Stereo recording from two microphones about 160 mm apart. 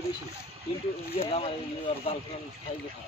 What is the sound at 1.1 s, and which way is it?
Speech, 40° left (ahead or behind).